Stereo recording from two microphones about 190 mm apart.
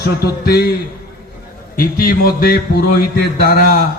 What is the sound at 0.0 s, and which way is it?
Speech, 55° left (ahead or behind).